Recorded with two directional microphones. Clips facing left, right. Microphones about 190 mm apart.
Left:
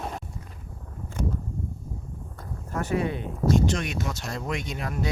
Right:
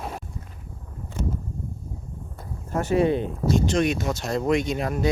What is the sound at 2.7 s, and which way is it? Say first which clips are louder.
Speech: right 6 dB; 25° right (ahead or behind).